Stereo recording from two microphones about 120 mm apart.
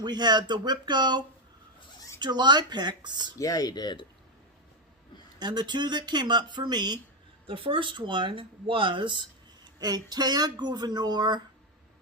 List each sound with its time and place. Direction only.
0.0 s speech: 35° right (ahead or behind)
3.3 s speech: 30° left (ahead or behind)
5.4 s speech: 35° right (ahead or behind)
7.4 s speech: 45° right (ahead or behind)